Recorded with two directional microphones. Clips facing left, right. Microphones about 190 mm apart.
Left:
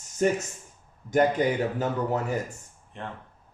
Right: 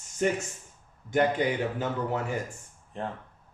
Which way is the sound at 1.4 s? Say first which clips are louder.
Left 3 dB; 45° left (ahead or behind).